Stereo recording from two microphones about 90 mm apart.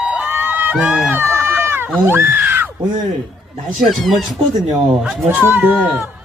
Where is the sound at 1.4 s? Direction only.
25° right (ahead or behind).